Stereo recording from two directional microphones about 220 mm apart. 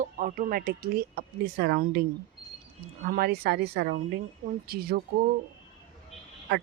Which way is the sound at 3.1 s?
45° right (ahead or behind).